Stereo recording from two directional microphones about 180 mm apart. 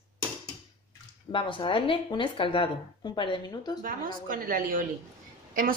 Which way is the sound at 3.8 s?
50° right (ahead or behind).